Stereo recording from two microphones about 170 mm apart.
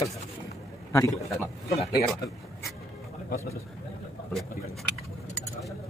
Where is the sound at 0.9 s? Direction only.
20° left (ahead or behind).